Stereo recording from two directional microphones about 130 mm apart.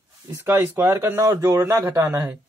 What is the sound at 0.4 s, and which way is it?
Speech, 20° right (ahead or behind).